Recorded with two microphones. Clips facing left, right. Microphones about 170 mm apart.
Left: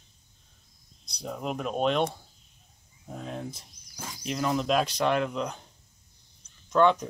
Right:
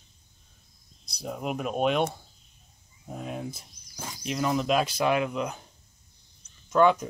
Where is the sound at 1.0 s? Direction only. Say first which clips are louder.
Right 1 dB; 5° right (ahead or behind).